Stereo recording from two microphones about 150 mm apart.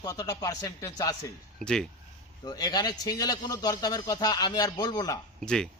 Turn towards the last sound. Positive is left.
turn(degrees=5)  # may be behind; listen again after turning